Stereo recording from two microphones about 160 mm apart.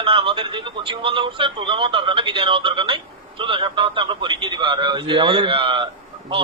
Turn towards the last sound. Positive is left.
turn(degrees=-30)  # may be behind; listen again after turning